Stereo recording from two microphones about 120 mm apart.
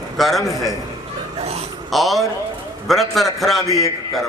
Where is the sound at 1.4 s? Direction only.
60° right (ahead or behind).